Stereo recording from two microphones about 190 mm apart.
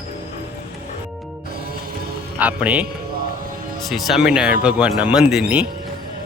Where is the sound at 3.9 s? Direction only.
Centre (ahead or behind).